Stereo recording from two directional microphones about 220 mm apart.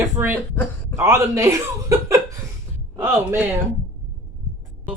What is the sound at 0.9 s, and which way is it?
Speech, 15° right (ahead or behind).